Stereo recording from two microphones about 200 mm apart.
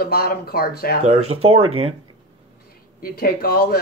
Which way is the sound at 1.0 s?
35° right (ahead or behind).